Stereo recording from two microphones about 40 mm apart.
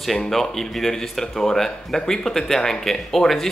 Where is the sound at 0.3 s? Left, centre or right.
Centre.